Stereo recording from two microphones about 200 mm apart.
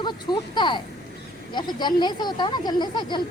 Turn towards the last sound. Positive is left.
turn(degrees=20)  # may be behind; listen again after turning